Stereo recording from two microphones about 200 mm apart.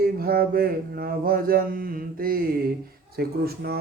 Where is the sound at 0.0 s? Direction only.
50° right (ahead or behind).